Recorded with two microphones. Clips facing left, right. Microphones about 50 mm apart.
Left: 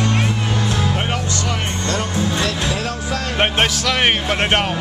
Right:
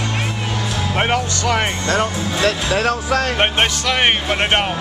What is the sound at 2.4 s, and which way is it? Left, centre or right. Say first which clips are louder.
Speech: right 5 dB; right.